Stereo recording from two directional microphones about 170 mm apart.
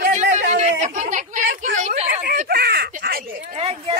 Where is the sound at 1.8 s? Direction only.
40° right (ahead or behind).